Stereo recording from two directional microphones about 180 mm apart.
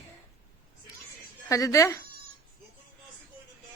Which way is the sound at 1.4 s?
15° left (ahead or behind).